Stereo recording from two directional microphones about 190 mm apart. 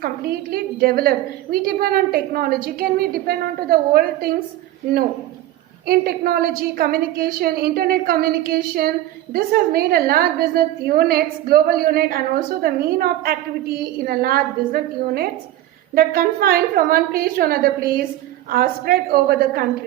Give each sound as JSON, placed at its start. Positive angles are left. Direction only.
{"t": 0.0, "sound": "a woman's voice", "side_deg": -55}
{"t": 5.8, "sound": "a woman's voice", "side_deg": -50}